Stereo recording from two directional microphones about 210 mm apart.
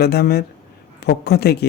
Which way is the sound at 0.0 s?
50° left (ahead or behind).